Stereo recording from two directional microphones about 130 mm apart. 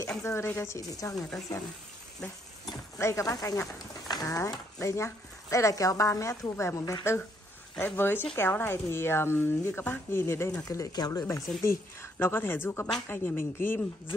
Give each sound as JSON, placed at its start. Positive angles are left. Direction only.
{"t": 0.2, "sound": "speech", "side_deg": 20}
{"t": 3.0, "sound": "speech", "side_deg": 20}